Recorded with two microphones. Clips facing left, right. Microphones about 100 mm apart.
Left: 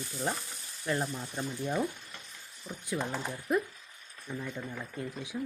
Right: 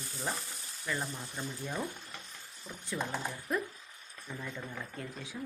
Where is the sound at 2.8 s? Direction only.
15° left (ahead or behind).